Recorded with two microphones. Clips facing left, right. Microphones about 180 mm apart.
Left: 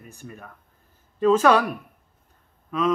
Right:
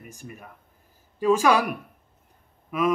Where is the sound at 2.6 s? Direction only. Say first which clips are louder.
Even; 10° right (ahead or behind).